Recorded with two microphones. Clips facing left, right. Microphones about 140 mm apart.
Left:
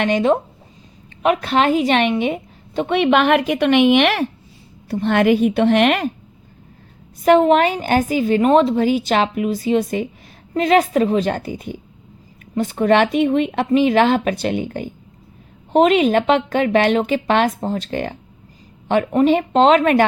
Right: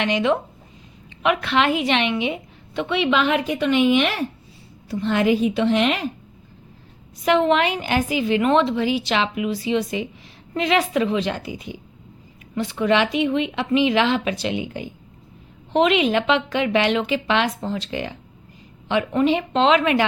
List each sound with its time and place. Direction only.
0.0 s a woman's voice: 45° left (ahead or behind); by 4.3 s 75° left (ahead or behind)
4.9 s a woman's voice: 60° left (ahead or behind)
7.3 s a woman's voice: 45° left (ahead or behind)